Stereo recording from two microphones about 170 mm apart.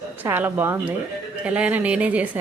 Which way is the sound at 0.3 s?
10° right (ahead or behind).